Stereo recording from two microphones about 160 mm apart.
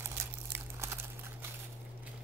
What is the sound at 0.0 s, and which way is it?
Crumpling, 15° right (ahead or behind).